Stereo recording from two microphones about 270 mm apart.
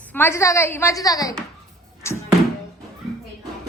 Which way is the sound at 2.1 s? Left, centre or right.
Centre.